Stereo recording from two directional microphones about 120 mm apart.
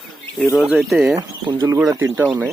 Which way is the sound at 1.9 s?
20° right (ahead or behind).